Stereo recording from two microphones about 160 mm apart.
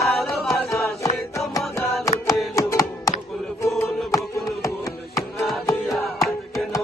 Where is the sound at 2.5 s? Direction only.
20° left (ahead or behind).